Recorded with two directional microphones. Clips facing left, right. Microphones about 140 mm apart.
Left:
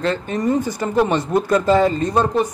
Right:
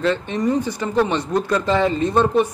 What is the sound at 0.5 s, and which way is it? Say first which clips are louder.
Speech: left 1 dB; 45° left (ahead or behind).